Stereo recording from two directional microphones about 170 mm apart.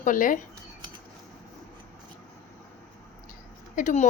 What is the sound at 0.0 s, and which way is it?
Speech, 50° left (ahead or behind).